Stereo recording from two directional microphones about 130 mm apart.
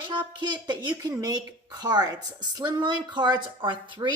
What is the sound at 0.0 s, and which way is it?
A woman's voice, 35° right (ahead or behind).